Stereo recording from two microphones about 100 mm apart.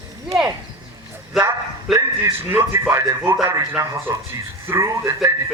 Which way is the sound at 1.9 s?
25° right (ahead or behind).